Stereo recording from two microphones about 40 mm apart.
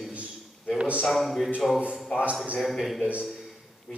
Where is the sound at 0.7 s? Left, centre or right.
Right.